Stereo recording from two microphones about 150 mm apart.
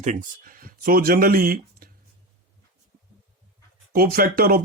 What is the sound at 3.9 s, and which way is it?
Speech, 75° right (ahead or behind).